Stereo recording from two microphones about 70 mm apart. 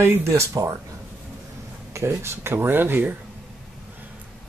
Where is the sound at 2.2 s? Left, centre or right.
Right.